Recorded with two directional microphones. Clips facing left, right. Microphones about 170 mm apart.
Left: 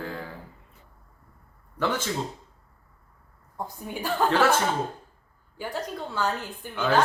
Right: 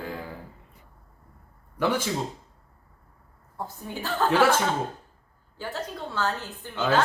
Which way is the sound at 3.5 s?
15° left (ahead or behind).